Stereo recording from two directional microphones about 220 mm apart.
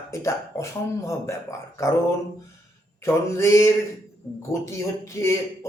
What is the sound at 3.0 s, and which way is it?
A man's voice, 10° left (ahead or behind).